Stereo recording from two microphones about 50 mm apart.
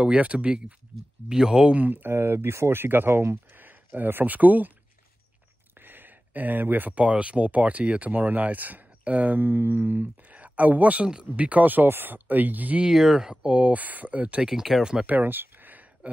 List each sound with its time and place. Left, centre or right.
0.0 s speech: right
1.3 s speech: centre
1.8 s speech: right
5.8 s a sound: right
7.0 s speech: right
12.8 s speech: centre
13.5 s speech: right
14.4 s speech: centre
15.0 s a sound: right